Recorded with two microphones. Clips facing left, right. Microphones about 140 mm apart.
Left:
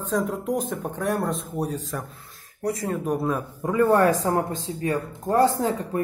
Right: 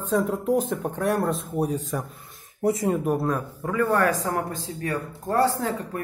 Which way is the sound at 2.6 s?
25° right (ahead or behind).